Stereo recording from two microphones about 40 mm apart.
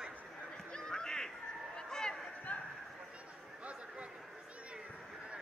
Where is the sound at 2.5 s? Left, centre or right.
Left.